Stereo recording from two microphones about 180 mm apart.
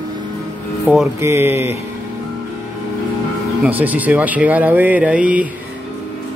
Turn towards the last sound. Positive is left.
turn(degrees=-5)  # may be behind; listen again after turning